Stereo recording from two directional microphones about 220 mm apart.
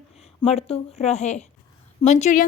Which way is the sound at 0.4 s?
25° left (ahead or behind).